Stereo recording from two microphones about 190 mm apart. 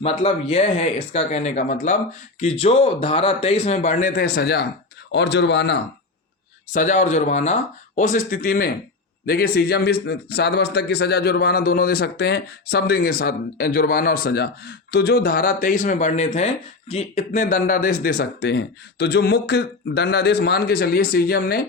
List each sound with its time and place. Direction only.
0.0 s a man's voice: 30° left (ahead or behind); by 5.8 s 65° left (ahead or behind)
6.7 s a man's voice: 40° left (ahead or behind)